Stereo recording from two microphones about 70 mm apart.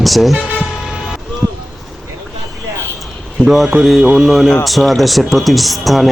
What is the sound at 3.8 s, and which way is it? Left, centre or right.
Speech, centre.